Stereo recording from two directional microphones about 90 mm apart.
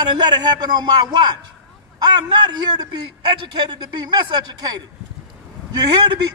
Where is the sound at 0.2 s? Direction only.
50° right (ahead or behind).